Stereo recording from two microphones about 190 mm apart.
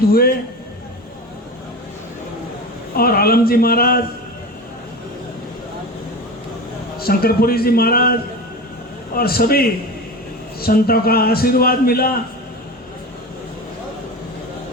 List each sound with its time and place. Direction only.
0.1 s a man's voice: 50° left (ahead or behind)
2.9 s a man's voice: 50° left (ahead or behind)
7.0 s a man's voice: 55° left (ahead or behind)